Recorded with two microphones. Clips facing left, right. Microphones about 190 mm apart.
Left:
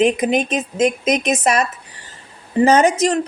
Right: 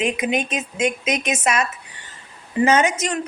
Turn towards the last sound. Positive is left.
turn(degrees=35)  # may be behind; listen again after turning